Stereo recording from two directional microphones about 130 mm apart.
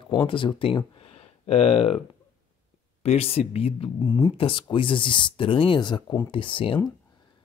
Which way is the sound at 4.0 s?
35° left (ahead or behind).